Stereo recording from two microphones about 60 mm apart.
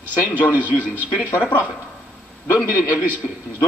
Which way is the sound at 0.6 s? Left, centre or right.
Left.